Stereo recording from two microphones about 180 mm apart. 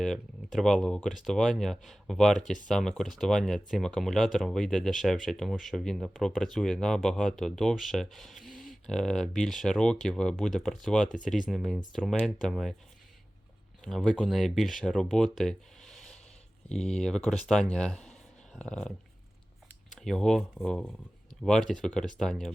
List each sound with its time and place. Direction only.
0.0 s speech: centre (ahead or behind)
13.8 s speech: centre (ahead or behind)